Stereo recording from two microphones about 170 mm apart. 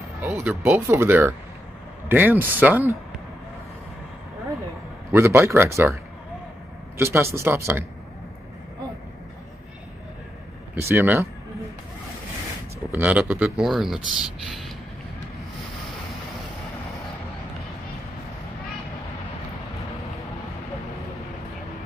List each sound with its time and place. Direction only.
0.2 s speech: 10° right (ahead or behind)
5.1 s speech: 15° right (ahead or behind)
7.0 s speech: 15° right (ahead or behind)
10.7 s speech: 15° right (ahead or behind)
12.9 s speech: 10° right (ahead or behind)